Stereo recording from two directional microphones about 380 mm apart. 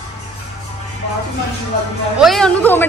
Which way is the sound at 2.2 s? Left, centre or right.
Centre.